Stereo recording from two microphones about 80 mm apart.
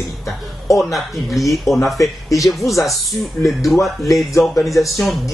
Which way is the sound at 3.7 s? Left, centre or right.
Centre.